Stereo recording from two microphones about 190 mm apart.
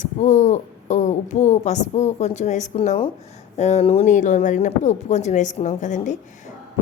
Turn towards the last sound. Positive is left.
turn(degrees=40)  # may be behind; listen again after turning